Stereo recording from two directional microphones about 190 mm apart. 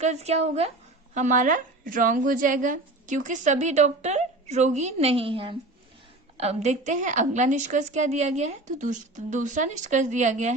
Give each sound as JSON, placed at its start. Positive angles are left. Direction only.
{"t": 0.0, "sound": "a woman's voice", "side_deg": -35}